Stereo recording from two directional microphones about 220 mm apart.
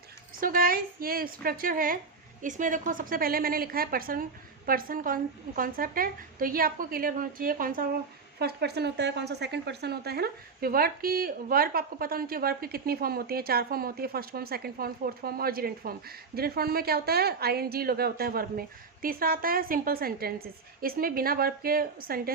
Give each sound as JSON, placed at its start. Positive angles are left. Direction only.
{"t": 0.3, "sound": "a woman's voice", "side_deg": -40}